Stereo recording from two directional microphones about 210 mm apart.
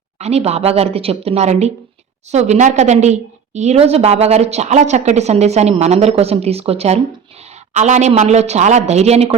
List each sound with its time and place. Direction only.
0.2 s a woman's voice: 30° right (ahead or behind)